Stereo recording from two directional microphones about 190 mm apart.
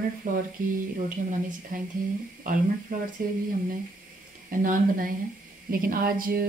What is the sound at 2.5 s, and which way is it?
Speech, 45° right (ahead or behind).